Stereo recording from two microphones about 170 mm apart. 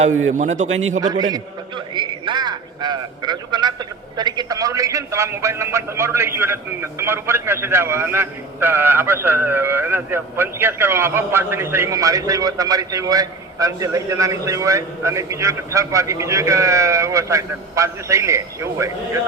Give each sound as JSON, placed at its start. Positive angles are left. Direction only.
{"t": 0.3, "sound": "a man's voice", "side_deg": -45}
{"t": 1.0, "sound": "a man's voice", "side_deg": -20}